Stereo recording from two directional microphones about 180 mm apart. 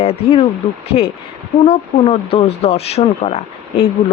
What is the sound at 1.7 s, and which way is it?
Speech, 30° left (ahead or behind).